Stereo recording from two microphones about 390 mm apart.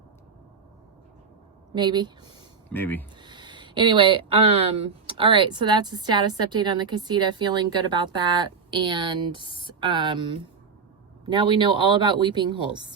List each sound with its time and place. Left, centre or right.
1.7 s a woman's voice: centre
2.7 s speech: centre
3.2 s a sound: centre
5.0 s a woman's voice: centre